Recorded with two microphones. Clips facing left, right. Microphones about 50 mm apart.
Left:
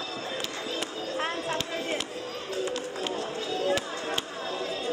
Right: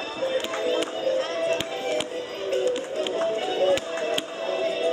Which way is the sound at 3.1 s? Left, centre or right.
Right.